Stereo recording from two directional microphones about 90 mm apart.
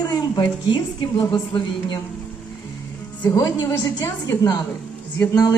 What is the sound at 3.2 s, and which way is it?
Speech, 35° left (ahead or behind).